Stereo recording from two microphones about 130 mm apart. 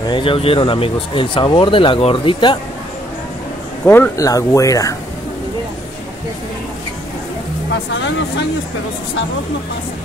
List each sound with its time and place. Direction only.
0.0 s speech: 40° left (ahead or behind)
3.8 s speech: 15° left (ahead or behind)